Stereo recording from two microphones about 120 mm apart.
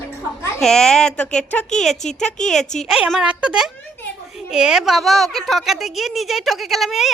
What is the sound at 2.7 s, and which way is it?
A woman's voice, centre (ahead or behind).